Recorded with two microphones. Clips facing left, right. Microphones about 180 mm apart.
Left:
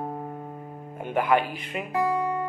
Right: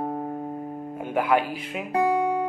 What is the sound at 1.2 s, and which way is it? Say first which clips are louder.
Speech: even; 5° right (ahead or behind).